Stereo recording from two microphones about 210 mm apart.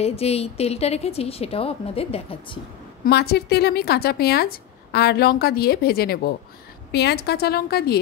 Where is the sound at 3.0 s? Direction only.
50° left (ahead or behind).